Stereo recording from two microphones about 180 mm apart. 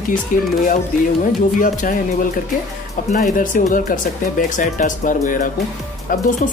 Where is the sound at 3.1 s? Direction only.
45° left (ahead or behind).